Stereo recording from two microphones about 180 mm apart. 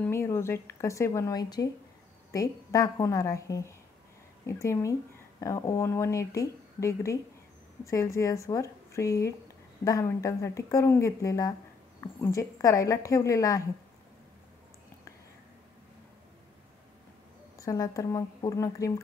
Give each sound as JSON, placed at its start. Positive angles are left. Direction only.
{"t": 0.0, "sound": "speech", "side_deg": 15}
{"t": 17.6, "sound": "a woman's voice", "side_deg": 20}